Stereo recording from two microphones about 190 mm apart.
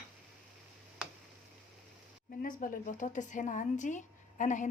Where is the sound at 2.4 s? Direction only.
45° left (ahead or behind).